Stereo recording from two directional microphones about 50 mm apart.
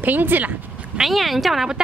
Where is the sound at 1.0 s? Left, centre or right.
Centre.